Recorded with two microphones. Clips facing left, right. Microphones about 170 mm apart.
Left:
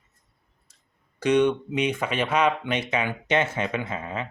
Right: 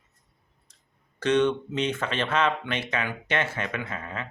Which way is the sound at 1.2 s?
15° left (ahead or behind).